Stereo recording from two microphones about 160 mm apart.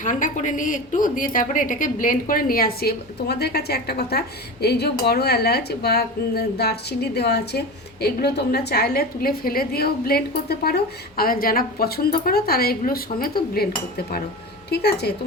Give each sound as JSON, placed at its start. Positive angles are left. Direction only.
{"t": 0.0, "sound": "a woman's voice", "side_deg": 55}
{"t": 14.7, "sound": "a woman's voice", "side_deg": 90}